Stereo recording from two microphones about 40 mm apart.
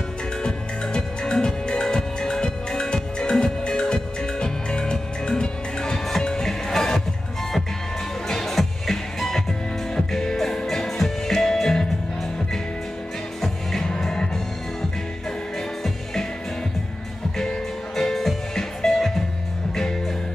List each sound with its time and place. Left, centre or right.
0.4 s music: left
8.3 s music: centre
13.4 s music: centre
17.4 s music: centre